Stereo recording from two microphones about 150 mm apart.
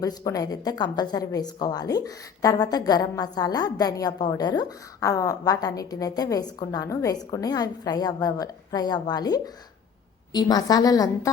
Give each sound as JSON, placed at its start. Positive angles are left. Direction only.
{"t": 0.0, "sound": "a woman's voice", "side_deg": 25}